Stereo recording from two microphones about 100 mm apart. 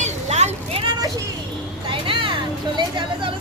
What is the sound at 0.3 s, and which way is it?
Vehicle, 80° right.